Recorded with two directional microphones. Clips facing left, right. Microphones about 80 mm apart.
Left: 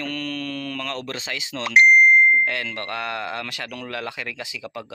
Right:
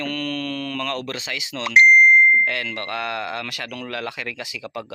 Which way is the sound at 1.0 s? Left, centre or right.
Left.